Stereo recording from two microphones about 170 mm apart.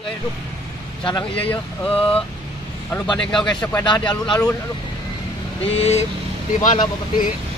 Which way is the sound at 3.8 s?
25° left (ahead or behind).